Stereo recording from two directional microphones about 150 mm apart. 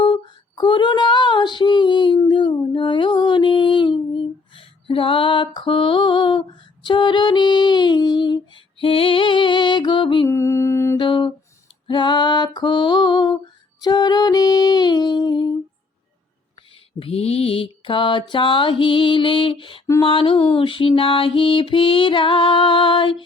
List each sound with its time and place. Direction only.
0.0 s female singing: 30° left (ahead or behind)
10.2 s music: 20° left (ahead or behind)
10.9 s humming: 30° left (ahead or behind)
11.9 s female singing: 30° left (ahead or behind)
13.8 s music: 25° left (ahead or behind)
17.0 s mantra: 40° left (ahead or behind)